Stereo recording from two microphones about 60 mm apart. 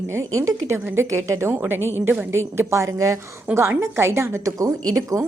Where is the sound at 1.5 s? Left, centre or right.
Right.